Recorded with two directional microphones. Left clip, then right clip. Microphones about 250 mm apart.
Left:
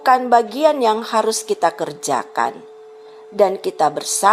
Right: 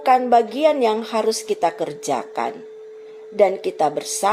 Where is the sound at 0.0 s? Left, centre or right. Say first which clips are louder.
Left 2 dB; left.